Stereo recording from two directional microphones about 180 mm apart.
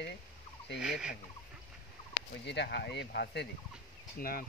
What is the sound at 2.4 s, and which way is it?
Speech, 70° left (ahead or behind).